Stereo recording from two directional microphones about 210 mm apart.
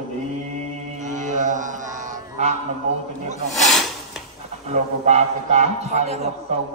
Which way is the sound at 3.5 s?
Centre (ahead or behind).